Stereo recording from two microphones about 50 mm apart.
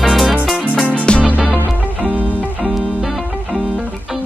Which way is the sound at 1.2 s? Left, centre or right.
Right.